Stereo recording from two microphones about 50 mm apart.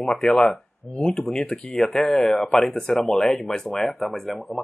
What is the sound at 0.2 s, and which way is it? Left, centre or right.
Speech, centre.